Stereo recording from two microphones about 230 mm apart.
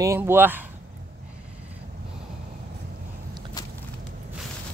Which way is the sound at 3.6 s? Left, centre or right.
Centre.